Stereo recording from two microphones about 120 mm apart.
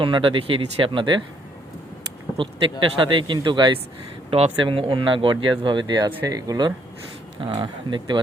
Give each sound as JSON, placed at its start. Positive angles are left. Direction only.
{"t": 0.0, "sound": "speech", "side_deg": -45}
{"t": 2.4, "sound": "speech", "side_deg": -45}
{"t": 4.3, "sound": "speech", "side_deg": -55}
{"t": 4.6, "sound": "speech", "side_deg": -45}
{"t": 7.4, "sound": "speech", "side_deg": -45}